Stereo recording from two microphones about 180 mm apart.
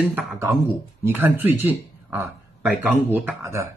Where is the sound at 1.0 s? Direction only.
10° right (ahead or behind).